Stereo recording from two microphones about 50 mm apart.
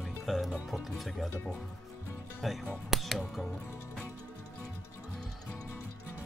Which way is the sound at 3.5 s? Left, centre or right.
Left.